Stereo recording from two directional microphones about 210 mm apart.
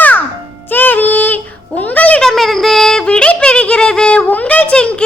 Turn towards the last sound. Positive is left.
turn(degrees=5)  # may be behind; listen again after turning